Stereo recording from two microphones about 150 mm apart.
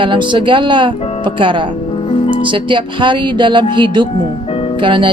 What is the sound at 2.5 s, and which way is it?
A woman's voice, 35° right (ahead or behind).